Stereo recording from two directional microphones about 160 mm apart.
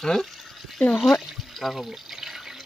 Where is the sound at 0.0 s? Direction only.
Centre (ahead or behind).